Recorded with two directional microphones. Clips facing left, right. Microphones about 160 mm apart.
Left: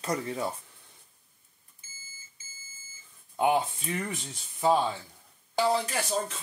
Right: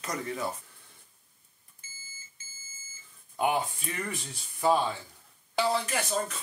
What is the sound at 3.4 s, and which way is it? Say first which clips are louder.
Speech: left 3 dB; 20° left (ahead or behind).